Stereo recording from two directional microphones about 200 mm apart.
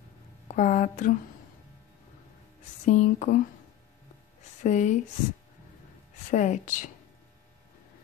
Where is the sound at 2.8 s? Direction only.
40° left (ahead or behind).